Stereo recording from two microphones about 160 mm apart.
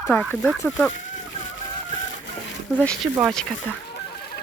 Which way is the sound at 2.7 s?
5° left (ahead or behind).